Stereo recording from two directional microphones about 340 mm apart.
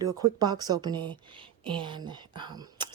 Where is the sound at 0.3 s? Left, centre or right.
Centre.